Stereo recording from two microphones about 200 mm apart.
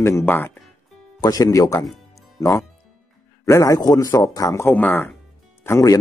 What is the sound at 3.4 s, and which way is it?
Speech, 15° left (ahead or behind).